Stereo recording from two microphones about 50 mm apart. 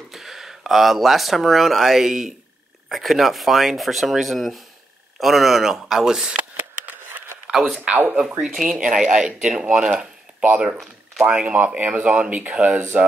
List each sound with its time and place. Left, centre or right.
0.1 s speech: centre
7.5 s speech: centre
8.8 s speech: centre